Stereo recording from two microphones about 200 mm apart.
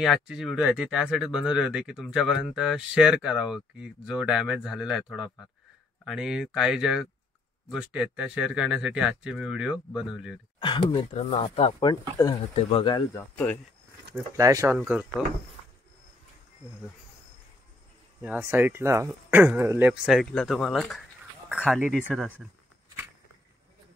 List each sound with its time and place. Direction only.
0.0 s speech: centre (ahead or behind)
10.6 s speech: 25° left (ahead or behind)
14.1 s speech: 15° right (ahead or behind)
14.8 s speech: 5° right (ahead or behind)
18.2 s speech: 10° right (ahead or behind)